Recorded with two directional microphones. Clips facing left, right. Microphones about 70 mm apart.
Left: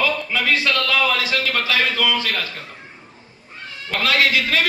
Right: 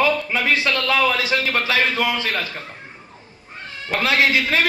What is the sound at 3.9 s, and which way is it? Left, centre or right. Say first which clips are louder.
Speech: right 1 dB; right.